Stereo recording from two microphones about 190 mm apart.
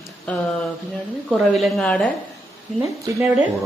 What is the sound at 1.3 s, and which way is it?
Speech, centre (ahead or behind).